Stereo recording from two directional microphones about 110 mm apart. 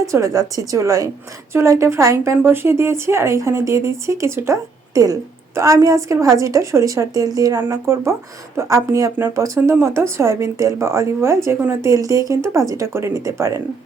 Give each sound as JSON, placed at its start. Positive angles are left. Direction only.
{"t": 0.0, "sound": "a woman's voice", "side_deg": -30}
{"t": 5.5, "sound": "a woman's voice", "side_deg": -30}